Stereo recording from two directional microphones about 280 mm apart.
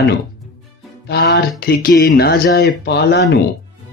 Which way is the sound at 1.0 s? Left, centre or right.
Left.